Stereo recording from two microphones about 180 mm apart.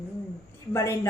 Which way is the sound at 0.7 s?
15° left (ahead or behind).